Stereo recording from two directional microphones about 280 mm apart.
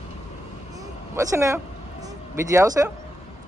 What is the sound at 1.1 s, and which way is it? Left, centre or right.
Speech, centre.